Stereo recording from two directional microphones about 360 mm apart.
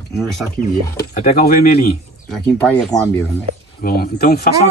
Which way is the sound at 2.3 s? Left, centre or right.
Centre.